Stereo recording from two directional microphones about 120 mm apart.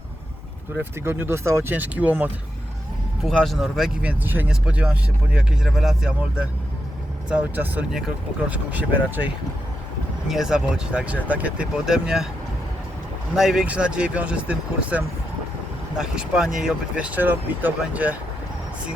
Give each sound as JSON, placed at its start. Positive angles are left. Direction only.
{"t": 0.8, "sound": "speech", "side_deg": -15}
{"t": 3.2, "sound": "speech", "side_deg": 0}
{"t": 4.2, "sound": "speech", "side_deg": -15}
{"t": 10.2, "sound": "speech", "side_deg": -5}
{"t": 13.3, "sound": "speech", "side_deg": -5}